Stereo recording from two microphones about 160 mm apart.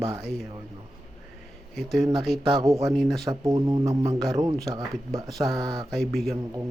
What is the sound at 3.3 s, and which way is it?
Speech, 20° right (ahead or behind).